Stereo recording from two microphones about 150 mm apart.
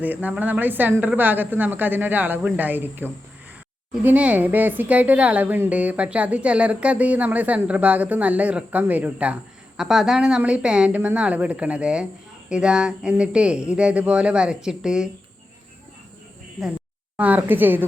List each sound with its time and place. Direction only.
0.0 s speech: 10° right (ahead or behind)
17.2 s speech: 10° right (ahead or behind)